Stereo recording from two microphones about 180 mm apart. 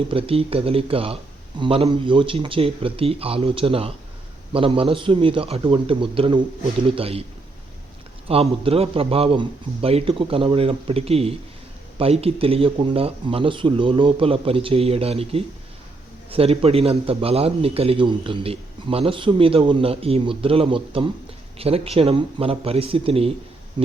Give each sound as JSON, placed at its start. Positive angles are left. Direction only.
{"t": 0.1, "sound": "a man's voice", "side_deg": -30}
{"t": 8.3, "sound": "a man's voice", "side_deg": -35}